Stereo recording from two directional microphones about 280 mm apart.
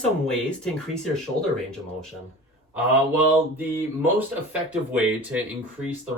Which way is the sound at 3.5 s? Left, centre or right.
Centre.